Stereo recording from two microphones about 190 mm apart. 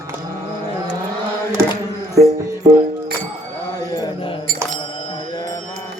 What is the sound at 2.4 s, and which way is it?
Music, 15° right (ahead or behind).